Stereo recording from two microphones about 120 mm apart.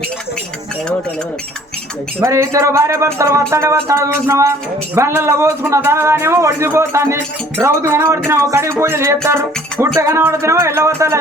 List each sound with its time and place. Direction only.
2.2 s speech: 25° right (ahead or behind)